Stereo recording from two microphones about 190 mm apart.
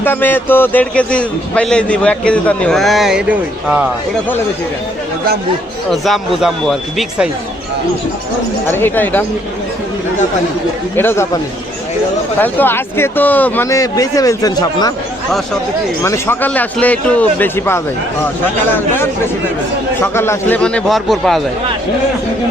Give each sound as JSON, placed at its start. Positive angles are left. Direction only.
{"t": 0.0, "sound": "a man's voice", "side_deg": 10}
{"t": 5.9, "sound": "a man's voice", "side_deg": 0}
{"t": 8.6, "sound": "speech", "side_deg": 10}
{"t": 10.9, "sound": "speech", "side_deg": 10}
{"t": 12.4, "sound": "speech", "side_deg": 10}
{"t": 16.0, "sound": "a man's voice", "side_deg": 15}